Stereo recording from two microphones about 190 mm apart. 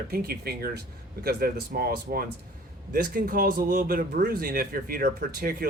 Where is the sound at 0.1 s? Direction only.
55° right (ahead or behind).